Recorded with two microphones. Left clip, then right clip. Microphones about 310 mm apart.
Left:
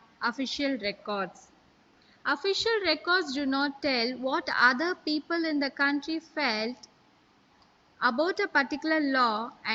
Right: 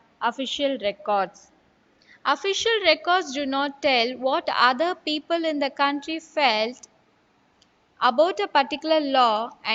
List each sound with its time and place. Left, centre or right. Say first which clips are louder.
0.2 s a man's voice: right 6 dB; centre
2.2 s a woman's voice: right 5 dB; centre
8.0 s a woman's voice: right 7 dB; centre